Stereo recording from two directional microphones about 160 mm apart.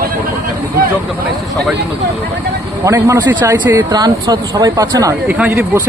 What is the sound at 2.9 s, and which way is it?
Speech, 20° right (ahead or behind).